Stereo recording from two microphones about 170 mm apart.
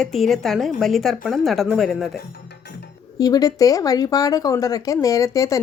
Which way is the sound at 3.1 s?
20° left (ahead or behind).